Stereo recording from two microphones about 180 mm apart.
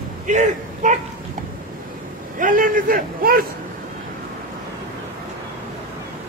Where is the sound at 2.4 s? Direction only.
50° right (ahead or behind).